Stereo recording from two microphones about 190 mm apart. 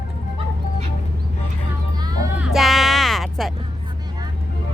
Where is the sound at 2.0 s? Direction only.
20° right (ahead or behind).